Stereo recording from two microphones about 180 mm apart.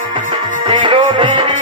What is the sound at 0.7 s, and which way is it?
Music, 30° right (ahead or behind).